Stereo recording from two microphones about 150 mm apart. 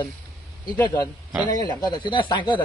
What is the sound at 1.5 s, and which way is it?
Speech, 25° left (ahead or behind).